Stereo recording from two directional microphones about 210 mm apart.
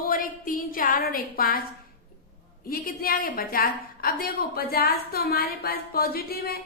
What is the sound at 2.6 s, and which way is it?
A woman's voice, 45° left (ahead or behind).